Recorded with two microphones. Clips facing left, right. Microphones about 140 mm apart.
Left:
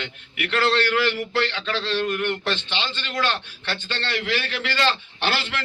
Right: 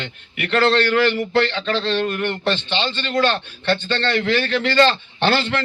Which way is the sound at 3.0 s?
35° right (ahead or behind).